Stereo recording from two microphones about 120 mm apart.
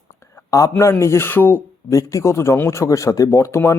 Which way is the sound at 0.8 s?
25° left (ahead or behind).